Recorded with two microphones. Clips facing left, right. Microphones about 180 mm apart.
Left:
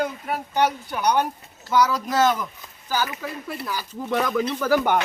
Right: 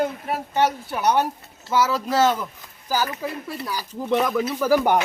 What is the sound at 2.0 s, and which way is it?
Speech, 30° right (ahead or behind).